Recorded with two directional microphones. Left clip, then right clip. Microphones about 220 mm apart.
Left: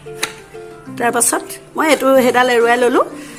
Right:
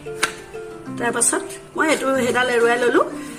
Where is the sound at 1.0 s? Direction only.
30° left (ahead or behind).